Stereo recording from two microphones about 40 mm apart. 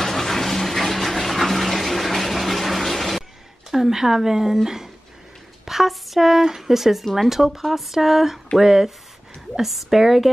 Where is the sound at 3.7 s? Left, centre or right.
Centre.